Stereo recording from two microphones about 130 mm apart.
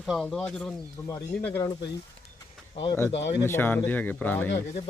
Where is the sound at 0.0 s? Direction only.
Centre (ahead or behind).